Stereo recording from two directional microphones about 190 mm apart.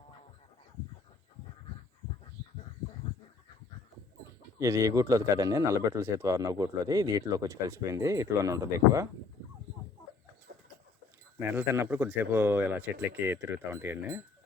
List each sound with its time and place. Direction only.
4.6 s speech: 15° right (ahead or behind)
11.5 s speech: 10° right (ahead or behind)